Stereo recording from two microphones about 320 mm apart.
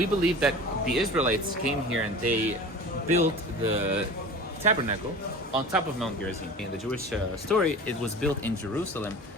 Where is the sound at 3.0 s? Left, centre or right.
Right.